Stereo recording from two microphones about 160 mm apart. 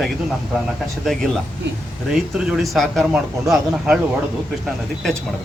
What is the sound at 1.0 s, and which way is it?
Speech, centre (ahead or behind).